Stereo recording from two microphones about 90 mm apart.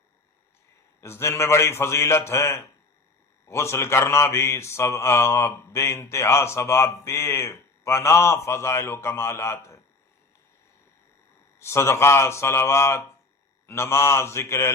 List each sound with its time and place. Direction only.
1.0 s speech: 30° left (ahead or behind)
11.6 s speech: 30° left (ahead or behind)